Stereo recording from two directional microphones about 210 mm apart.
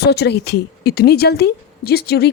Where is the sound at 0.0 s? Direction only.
50° left (ahead or behind).